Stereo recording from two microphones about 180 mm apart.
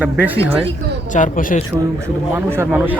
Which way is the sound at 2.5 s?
10° right (ahead or behind).